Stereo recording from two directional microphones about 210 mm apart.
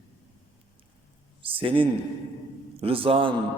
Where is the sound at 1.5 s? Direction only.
25° right (ahead or behind).